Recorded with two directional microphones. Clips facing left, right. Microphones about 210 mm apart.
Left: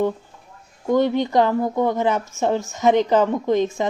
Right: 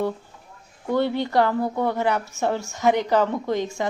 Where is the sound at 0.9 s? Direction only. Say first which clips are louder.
Left 4 dB; 15° left (ahead or behind).